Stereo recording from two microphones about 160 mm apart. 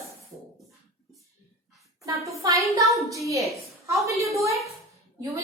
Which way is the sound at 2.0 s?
20° right (ahead or behind).